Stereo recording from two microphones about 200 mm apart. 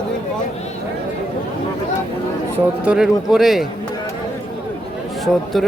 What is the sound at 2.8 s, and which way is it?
Speech, 5° right (ahead or behind).